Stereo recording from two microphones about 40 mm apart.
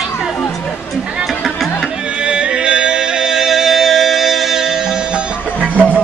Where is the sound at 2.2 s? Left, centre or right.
Right.